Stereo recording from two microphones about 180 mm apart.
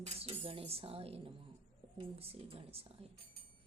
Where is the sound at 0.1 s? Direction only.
30° right (ahead or behind).